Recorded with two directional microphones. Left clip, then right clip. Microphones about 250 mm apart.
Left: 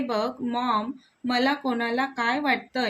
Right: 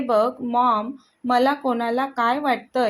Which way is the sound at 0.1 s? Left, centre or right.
Centre.